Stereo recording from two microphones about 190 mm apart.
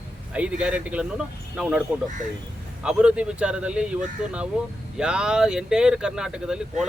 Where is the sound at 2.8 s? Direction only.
5° right (ahead or behind).